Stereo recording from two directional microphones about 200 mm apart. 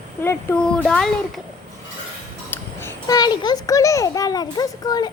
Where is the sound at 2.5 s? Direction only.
15° left (ahead or behind).